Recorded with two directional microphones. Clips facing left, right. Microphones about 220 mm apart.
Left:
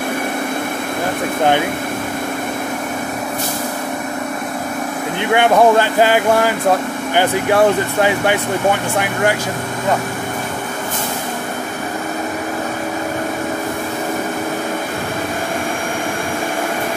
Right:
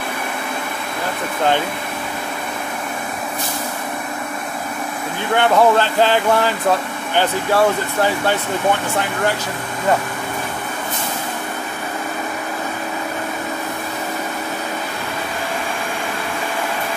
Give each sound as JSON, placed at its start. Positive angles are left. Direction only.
{"t": 5.3, "sound": "speech", "side_deg": 15}